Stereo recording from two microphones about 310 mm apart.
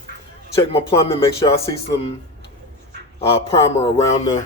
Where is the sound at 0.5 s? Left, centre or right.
Centre.